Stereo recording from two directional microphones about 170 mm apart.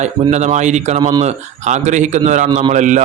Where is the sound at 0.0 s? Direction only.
40° right (ahead or behind).